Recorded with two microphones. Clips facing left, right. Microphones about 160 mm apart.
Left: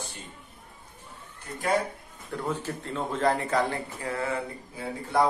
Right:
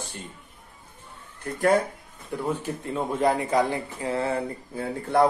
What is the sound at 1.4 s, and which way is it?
Speech, 55° right (ahead or behind).